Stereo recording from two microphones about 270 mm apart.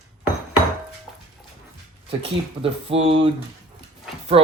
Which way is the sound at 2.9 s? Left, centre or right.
Right.